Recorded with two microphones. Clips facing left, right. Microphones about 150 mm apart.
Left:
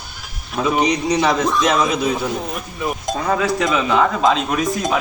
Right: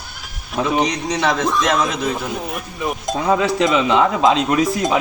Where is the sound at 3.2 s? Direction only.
20° right (ahead or behind).